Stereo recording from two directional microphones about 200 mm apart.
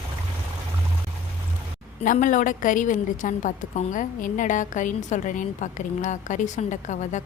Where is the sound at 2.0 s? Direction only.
40° left (ahead or behind).